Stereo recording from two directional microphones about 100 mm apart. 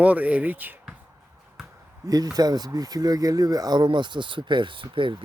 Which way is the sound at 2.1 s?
40° right (ahead or behind).